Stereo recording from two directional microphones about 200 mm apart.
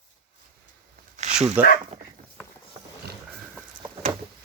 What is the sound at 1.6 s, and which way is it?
Speech, 10° right (ahead or behind).